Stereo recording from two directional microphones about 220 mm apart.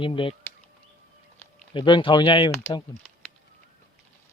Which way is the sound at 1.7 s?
20° left (ahead or behind).